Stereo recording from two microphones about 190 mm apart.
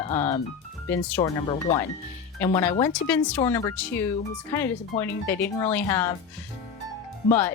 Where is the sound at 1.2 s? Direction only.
20° left (ahead or behind).